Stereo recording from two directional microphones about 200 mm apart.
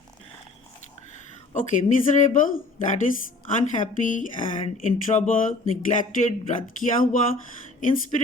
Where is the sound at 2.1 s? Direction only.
40° left (ahead or behind).